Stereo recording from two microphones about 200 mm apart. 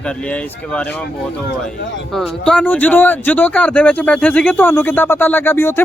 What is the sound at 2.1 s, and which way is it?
Speech, 5° left (ahead or behind).